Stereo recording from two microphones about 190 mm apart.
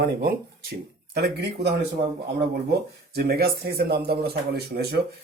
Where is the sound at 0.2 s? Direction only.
55° right (ahead or behind).